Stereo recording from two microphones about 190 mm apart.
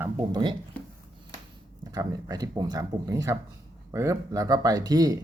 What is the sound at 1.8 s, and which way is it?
Speech, 20° right (ahead or behind).